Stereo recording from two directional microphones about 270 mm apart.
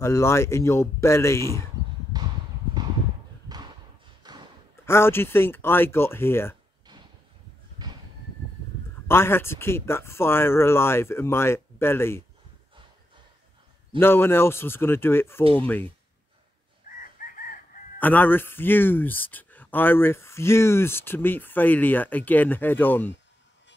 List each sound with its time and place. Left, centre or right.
0.0 s speech: centre
2.1 s a sound: centre
4.2 s a sound: centre
4.8 s speech: centre
9.0 s speech: centre
13.9 s speech: centre
16.9 s chicken: left
17.9 s speech: centre